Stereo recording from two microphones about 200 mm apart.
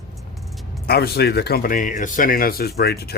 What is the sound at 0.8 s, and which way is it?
A man's voice, 50° left (ahead or behind).